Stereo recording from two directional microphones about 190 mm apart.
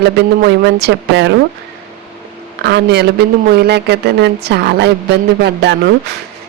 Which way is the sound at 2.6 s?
60° right (ahead or behind).